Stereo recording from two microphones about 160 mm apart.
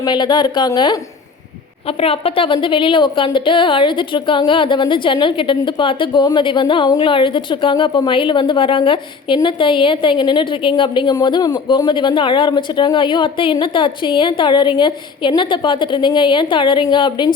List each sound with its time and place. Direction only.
0.0 s a woman's voice: 25° left (ahead or behind)